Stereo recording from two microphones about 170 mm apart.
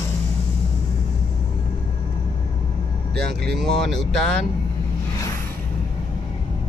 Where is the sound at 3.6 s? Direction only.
Centre (ahead or behind).